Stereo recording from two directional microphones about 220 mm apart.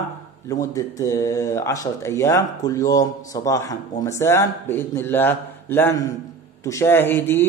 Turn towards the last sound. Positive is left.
turn(degrees=10)  # may be behind; listen again after turning